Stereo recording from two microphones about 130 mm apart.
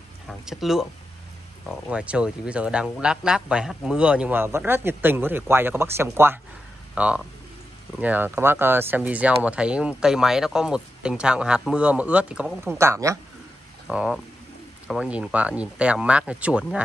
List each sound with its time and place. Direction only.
0.3 s a man's voice: centre (ahead or behind)
12.7 s speech: 20° right (ahead or behind)
13.8 s a man's voice: 5° right (ahead or behind)